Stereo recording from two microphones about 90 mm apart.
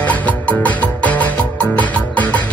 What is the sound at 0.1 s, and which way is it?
Music, 15° left (ahead or behind).